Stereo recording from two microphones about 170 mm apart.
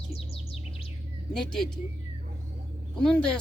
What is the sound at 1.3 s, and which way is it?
Speech, 5° left (ahead or behind).